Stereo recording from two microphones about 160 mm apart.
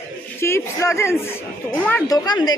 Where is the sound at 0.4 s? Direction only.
15° left (ahead or behind).